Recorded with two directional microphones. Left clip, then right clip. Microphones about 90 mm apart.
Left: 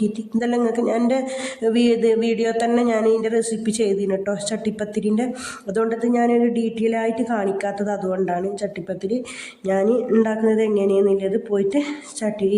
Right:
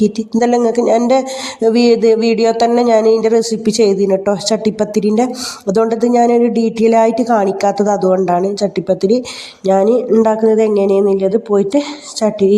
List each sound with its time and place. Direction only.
0.3 s speech: 25° right (ahead or behind)
1.6 s a sound: 15° right (ahead or behind)
2.7 s speech: 20° right (ahead or behind)